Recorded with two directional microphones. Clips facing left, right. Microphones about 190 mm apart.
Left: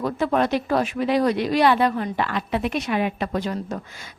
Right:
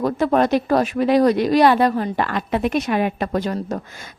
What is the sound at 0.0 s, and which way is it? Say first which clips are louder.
Speech: right 4 dB; 40° right (ahead or behind).